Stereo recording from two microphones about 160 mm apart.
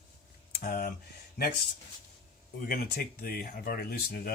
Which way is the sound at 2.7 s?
65° left (ahead or behind).